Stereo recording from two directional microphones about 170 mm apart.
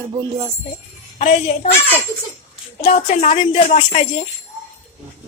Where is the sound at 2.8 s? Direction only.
40° left (ahead or behind).